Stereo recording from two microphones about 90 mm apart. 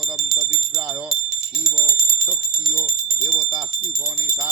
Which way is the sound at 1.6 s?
5° right (ahead or behind).